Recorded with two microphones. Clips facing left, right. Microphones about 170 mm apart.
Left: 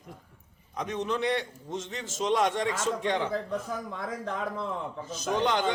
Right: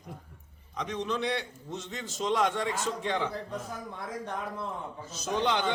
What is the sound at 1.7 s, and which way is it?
Speech, 90° left.